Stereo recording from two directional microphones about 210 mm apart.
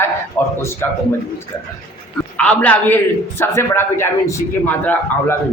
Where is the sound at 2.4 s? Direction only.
5° left (ahead or behind).